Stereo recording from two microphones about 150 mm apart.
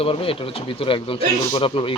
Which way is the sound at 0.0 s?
40° left (ahead or behind).